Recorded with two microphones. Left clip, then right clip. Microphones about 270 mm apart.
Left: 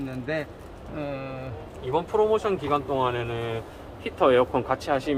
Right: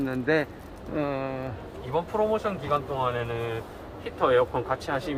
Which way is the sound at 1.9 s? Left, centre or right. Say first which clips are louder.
Left 3 dB; left.